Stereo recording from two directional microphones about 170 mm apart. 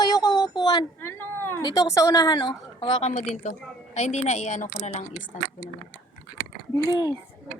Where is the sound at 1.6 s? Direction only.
20° left (ahead or behind); by 5.4 s 45° left (ahead or behind).